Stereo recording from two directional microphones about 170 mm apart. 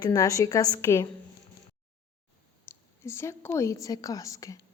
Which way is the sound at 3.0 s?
15° left (ahead or behind).